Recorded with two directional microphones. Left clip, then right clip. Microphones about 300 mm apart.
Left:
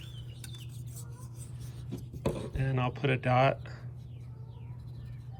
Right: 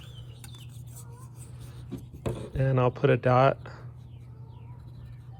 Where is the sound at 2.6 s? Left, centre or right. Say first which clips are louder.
Right 8 dB; centre.